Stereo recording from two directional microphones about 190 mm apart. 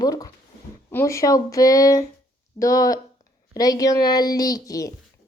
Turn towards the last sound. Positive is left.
turn(degrees=20)  # may be behind; listen again after turning